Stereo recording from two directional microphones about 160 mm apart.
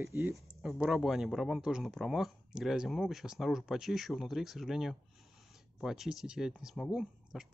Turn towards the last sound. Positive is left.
turn(degrees=-5)  # may be behind; listen again after turning